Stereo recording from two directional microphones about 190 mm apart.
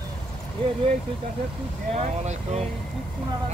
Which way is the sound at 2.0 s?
35° right (ahead or behind).